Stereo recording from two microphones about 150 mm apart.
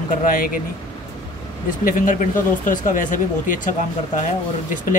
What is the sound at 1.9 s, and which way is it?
Speech, 65° left (ahead or behind).